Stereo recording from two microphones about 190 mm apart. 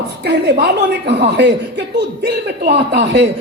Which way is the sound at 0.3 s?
60° right (ahead or behind).